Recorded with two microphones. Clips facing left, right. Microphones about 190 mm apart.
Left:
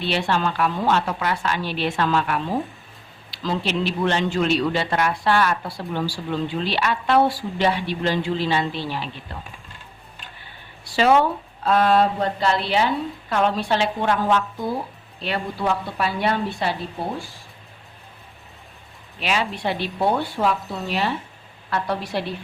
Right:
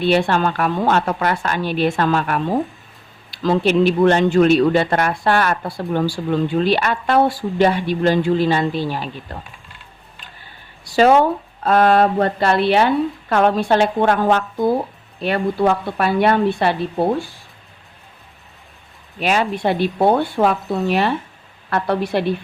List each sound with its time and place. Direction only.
0.0 s speech: 50° right (ahead or behind)
10.8 s speech: 45° right (ahead or behind)
19.2 s speech: 50° right (ahead or behind)